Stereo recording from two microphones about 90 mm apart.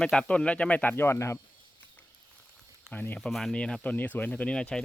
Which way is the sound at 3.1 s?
5° left (ahead or behind).